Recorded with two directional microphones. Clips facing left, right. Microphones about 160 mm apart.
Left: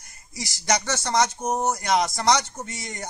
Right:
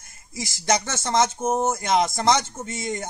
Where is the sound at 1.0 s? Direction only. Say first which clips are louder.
Right 3 dB; 25° right (ahead or behind).